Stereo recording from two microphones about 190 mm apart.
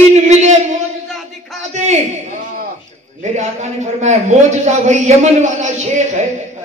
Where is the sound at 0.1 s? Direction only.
35° right (ahead or behind).